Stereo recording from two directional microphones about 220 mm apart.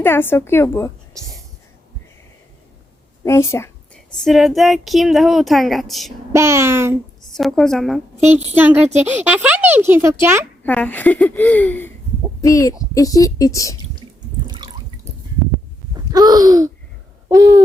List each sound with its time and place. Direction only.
0.0 s a woman's voice: 10° left (ahead or behind)
3.2 s a woman's voice: 10° left (ahead or behind)
4.1 s speech: centre (ahead or behind)
6.3 s speech: 10° right (ahead or behind)
7.3 s speech: centre (ahead or behind)
10.6 s a woman's voice: 5° left (ahead or behind)
14.4 s water: 20° right (ahead or behind)
16.1 s speech: 15° right (ahead or behind)
17.2 s owl: 15° right (ahead or behind)